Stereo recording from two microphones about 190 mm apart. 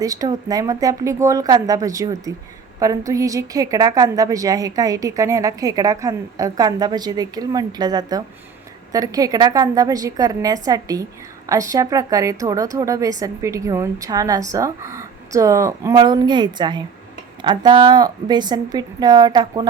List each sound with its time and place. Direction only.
0.0 s a woman's voice: 20° right (ahead or behind)